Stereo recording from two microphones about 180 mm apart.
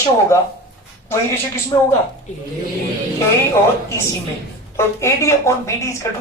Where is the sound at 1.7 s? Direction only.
20° left (ahead or behind).